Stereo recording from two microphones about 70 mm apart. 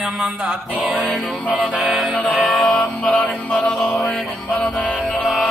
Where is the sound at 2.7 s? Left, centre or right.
Centre.